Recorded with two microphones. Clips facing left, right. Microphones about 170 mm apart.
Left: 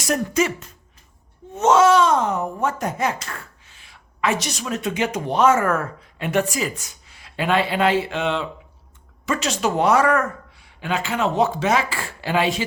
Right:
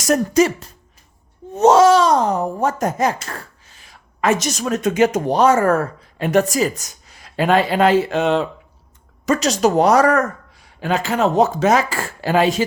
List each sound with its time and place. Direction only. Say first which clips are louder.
0.0 s speech: right 6 dB; 40° right (ahead or behind)